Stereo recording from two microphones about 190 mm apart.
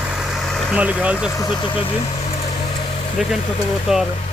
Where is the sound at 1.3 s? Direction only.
20° left (ahead or behind).